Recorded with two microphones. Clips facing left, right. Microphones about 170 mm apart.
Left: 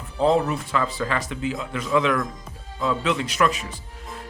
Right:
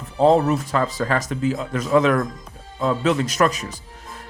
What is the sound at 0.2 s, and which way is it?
Speech, 40° right (ahead or behind).